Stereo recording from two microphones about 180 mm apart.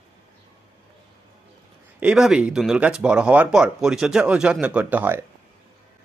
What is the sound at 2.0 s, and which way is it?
Speech, 5° right (ahead or behind).